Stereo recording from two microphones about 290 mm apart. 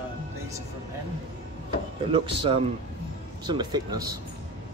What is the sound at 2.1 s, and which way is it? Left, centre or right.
Speech, centre.